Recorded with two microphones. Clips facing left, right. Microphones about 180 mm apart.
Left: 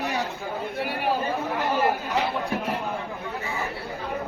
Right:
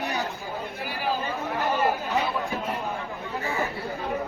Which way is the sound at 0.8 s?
60° left (ahead or behind).